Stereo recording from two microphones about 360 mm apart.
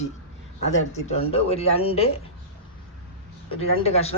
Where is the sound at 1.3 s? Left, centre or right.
Centre.